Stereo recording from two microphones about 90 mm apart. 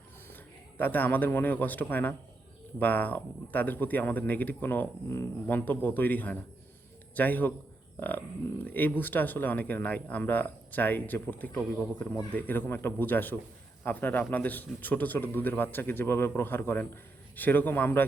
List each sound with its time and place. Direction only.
0.3 s a man's voice: 20° left (ahead or behind)
7.9 s a sound: 20° left (ahead or behind)
8.6 s a man's voice: 20° left (ahead or behind)